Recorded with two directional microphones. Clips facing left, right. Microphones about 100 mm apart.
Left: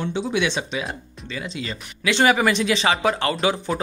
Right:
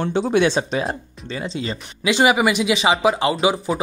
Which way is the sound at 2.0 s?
15° right (ahead or behind).